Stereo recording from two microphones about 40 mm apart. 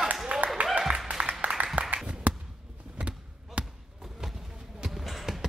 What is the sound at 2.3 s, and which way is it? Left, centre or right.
Basketball bounce, right.